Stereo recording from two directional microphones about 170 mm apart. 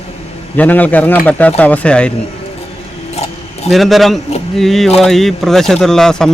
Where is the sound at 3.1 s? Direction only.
40° left (ahead or behind).